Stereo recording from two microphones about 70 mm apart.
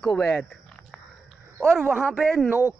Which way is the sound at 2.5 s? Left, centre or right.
Right.